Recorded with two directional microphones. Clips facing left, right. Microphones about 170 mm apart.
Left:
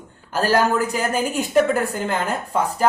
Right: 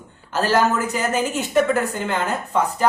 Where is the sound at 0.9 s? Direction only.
10° left (ahead or behind).